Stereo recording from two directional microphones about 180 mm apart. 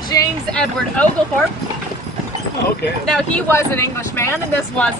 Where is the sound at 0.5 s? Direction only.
5° left (ahead or behind).